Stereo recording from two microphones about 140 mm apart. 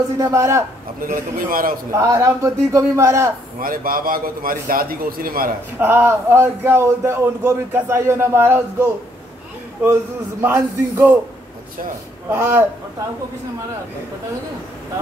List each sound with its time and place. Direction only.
0.2 s a man's voice: 20° right (ahead or behind)
1.0 s a man's voice: 85° right
1.9 s a man's voice: 20° right (ahead or behind)
3.6 s a man's voice: 90° right
5.8 s speech: 15° right (ahead or behind)
10.4 s speech: 15° right (ahead or behind)
12.3 s a man's voice: 20° right (ahead or behind)